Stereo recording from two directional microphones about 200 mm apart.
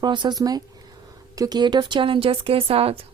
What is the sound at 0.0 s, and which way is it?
A woman's voice, 20° right (ahead or behind).